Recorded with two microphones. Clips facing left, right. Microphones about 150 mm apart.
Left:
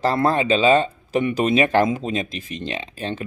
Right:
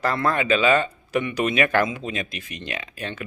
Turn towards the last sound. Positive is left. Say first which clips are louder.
# left 4 dB
turn(degrees=25)  # may be behind; listen again after turning